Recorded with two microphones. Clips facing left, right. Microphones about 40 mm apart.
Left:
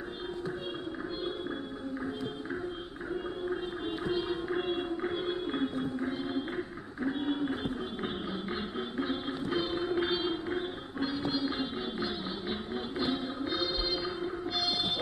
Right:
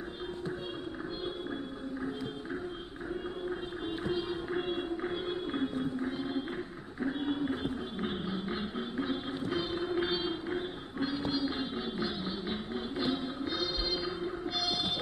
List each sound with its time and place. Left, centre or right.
4.1 s music: left
4.6 s music: centre
6.3 s music: centre
8.9 s music: left